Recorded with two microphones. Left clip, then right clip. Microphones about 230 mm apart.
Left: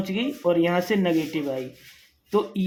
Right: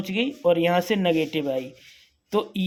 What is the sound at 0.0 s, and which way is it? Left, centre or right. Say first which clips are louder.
Speech: right 2 dB; right.